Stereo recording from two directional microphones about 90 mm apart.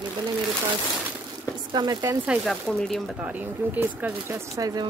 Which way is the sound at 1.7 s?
55° right (ahead or behind).